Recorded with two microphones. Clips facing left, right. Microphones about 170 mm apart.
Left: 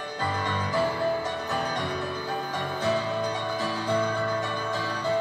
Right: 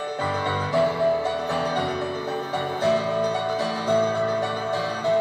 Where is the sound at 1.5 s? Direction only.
65° right (ahead or behind).